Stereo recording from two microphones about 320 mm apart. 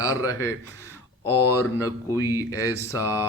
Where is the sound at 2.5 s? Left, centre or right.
Left.